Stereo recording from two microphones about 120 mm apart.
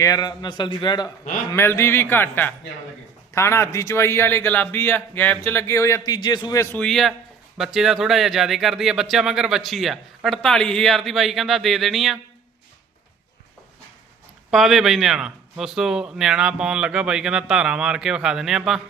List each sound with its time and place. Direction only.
0.0 s a man's voice: 30° left (ahead or behind)
1.5 s a man's voice: 20° left (ahead or behind); by 6.6 s 35° left (ahead or behind)
6.6 s a man's voice: 20° left (ahead or behind)
6.8 s speech: 5° left (ahead or behind)
14.5 s speech: centre (ahead or behind)